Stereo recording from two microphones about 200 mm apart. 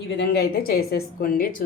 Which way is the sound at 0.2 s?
50° left (ahead or behind).